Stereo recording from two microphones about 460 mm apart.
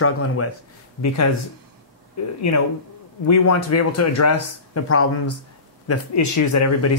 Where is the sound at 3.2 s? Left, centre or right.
Left.